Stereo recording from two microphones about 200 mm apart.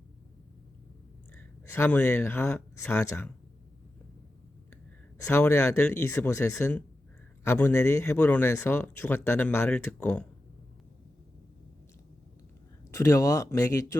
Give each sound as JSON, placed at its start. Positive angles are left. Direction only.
{"t": 1.4, "sound": "speech", "side_deg": 10}
{"t": 5.3, "sound": "speech", "side_deg": 10}
{"t": 12.9, "sound": "speech", "side_deg": 15}